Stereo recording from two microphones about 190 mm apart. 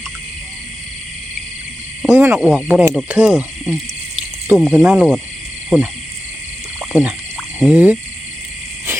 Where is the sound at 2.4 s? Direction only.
5° right (ahead or behind).